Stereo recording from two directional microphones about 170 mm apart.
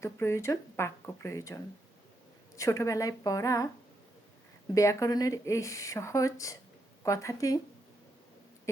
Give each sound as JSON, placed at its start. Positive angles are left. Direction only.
{"t": 0.0, "sound": "speech", "side_deg": 15}
{"t": 2.6, "sound": "speech", "side_deg": 20}
{"t": 4.7, "sound": "speech", "side_deg": 20}